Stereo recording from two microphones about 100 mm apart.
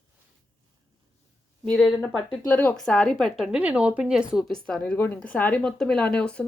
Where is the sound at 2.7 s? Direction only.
5° left (ahead or behind).